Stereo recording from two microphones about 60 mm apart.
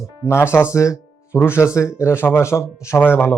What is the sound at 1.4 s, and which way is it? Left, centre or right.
Speech, left.